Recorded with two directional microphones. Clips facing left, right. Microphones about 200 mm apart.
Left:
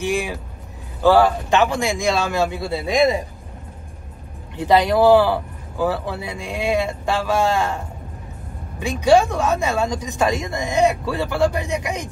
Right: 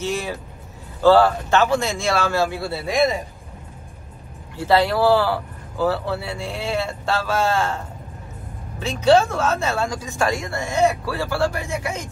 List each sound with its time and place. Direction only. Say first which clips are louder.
0.0 s speech: left 3 dB; 15° left (ahead or behind)
4.6 s speech: left 2 dB; 15° left (ahead or behind)